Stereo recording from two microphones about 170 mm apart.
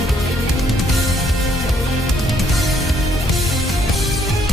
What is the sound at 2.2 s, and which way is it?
Music, centre (ahead or behind).